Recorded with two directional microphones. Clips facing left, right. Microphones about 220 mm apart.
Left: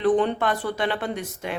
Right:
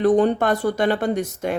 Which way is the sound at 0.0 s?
40° right (ahead or behind).